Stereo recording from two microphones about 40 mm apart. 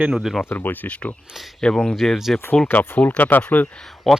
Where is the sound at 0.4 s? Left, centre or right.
Left.